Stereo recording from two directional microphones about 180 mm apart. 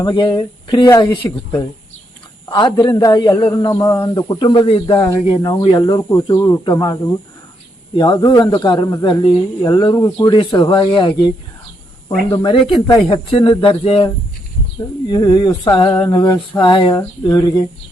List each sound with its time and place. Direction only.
0.0 s speech: 25° left (ahead or behind)
3.2 s speech: 15° left (ahead or behind)
12.3 s speech: 25° left (ahead or behind)
15.1 s speech: 25° left (ahead or behind)